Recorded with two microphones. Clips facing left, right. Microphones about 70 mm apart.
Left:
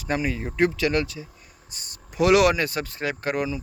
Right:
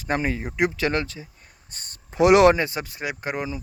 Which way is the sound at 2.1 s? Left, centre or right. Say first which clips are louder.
Right 3 dB; right.